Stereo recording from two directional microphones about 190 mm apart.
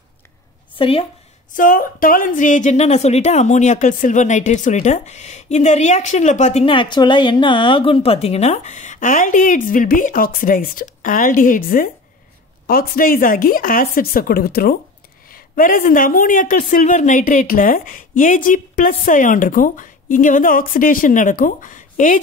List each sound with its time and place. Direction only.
0.7 s speech: 30° left (ahead or behind)
1.5 s a woman's voice: 45° left (ahead or behind)